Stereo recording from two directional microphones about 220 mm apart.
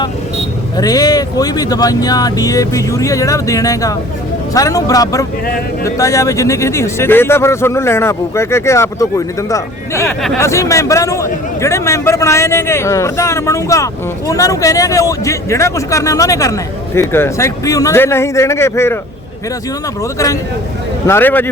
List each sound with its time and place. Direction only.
0.8 s speech: 15° left (ahead or behind)
21.1 s speech: 10° left (ahead or behind)